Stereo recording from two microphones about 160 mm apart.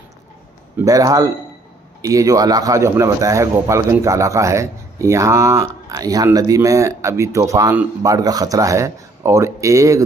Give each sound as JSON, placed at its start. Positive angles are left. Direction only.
{"t": 0.7, "sound": "a man's voice", "side_deg": -20}